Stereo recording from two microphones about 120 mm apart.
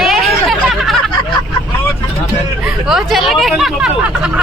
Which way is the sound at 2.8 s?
Centre (ahead or behind).